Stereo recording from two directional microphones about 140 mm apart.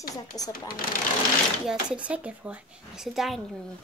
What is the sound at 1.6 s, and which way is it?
Speech, 10° right (ahead or behind).